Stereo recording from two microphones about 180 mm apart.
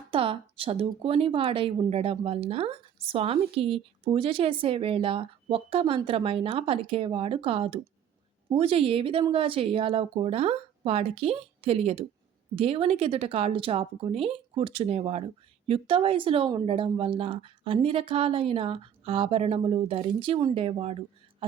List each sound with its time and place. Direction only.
0.1 s speech: 30° right (ahead or behind)